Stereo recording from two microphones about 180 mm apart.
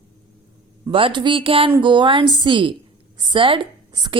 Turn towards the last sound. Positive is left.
turn(degrees=-25)  # may be behind; listen again after turning